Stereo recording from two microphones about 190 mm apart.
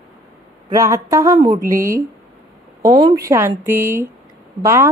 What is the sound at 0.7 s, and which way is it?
A woman's voice, 15° right (ahead or behind).